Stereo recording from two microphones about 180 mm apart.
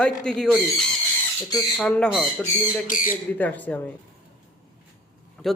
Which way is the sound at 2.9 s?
50° left (ahead or behind).